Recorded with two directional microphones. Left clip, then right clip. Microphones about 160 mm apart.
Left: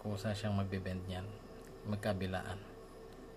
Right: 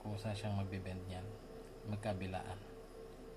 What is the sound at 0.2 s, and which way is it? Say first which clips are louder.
Speech: left 4 dB; 45° left (ahead or behind).